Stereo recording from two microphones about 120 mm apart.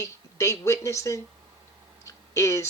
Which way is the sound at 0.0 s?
25° left (ahead or behind).